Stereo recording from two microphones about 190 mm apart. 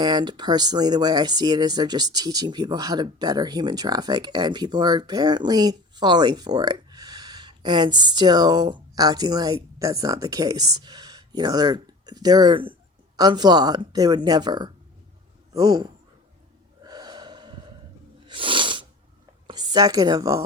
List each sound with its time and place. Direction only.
0.0 s speech: 20° right (ahead or behind)
16.8 s gasp: 20° right (ahead or behind)
18.3 s a sound: 25° right (ahead or behind)
19.5 s speech: 20° right (ahead or behind)